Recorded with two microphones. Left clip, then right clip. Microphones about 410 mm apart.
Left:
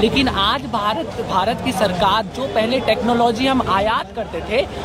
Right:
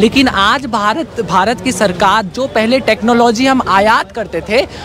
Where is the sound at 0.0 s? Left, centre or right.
Right.